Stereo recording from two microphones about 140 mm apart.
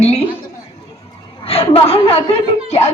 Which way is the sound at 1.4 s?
40° left (ahead or behind).